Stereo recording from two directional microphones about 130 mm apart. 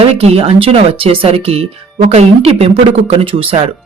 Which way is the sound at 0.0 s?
50° right (ahead or behind).